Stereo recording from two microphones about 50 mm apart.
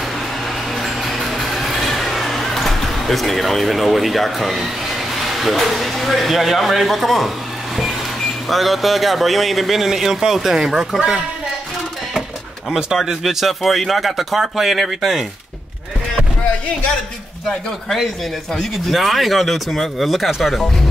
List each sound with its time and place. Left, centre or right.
0.7 s vehicle: centre
5.2 s speech: centre
12.6 s speech: centre
17.5 s speech: centre